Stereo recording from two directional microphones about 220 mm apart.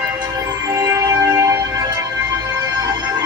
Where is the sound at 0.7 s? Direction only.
15° right (ahead or behind).